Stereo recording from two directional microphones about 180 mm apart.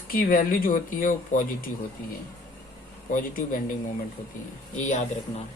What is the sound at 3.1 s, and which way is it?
Speech, 50° left (ahead or behind).